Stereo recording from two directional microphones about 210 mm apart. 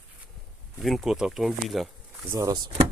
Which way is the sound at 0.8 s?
Centre (ahead or behind).